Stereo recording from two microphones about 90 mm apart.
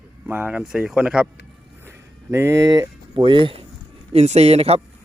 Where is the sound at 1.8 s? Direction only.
25° right (ahead or behind); by 3.2 s 45° right (ahead or behind).